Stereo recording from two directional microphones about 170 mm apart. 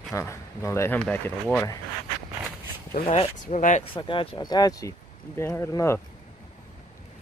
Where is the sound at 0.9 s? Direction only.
5° left (ahead or behind).